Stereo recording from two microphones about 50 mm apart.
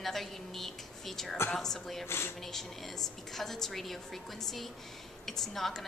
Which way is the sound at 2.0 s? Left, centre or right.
Left.